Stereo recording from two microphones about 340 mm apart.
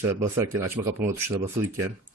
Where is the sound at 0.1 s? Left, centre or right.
Centre.